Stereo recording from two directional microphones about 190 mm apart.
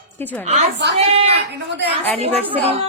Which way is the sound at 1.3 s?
60° right (ahead or behind).